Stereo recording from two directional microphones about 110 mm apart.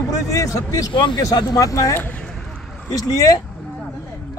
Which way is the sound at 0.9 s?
45° left (ahead or behind).